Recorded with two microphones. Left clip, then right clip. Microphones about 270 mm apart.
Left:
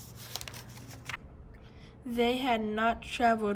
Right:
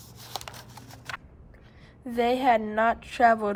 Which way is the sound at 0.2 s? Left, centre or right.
Centre.